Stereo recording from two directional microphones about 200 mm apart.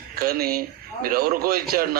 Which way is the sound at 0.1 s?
50° right (ahead or behind).